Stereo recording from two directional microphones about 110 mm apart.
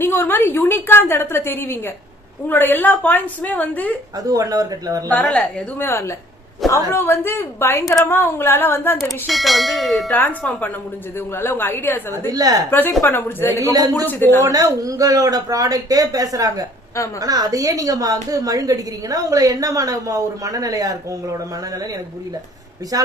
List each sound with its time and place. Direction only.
0.0 s a woman's voice: 20° left (ahead or behind)
4.3 s a woman's voice: 35° right (ahead or behind)
5.2 s a woman's voice: 10° left (ahead or behind)
9.0 s bell: centre (ahead or behind)
10.1 s a woman's voice: 15° left (ahead or behind)
12.1 s a woman's voice: 35° right (ahead or behind)
12.7 s a woman's voice: 20° left (ahead or behind)
13.6 s a woman's voice: 35° right (ahead or behind)
14.0 s a woman's voice: 15° left (ahead or behind)
14.4 s a woman's voice: 30° right (ahead or behind)
22.9 s a woman's voice: 30° right (ahead or behind)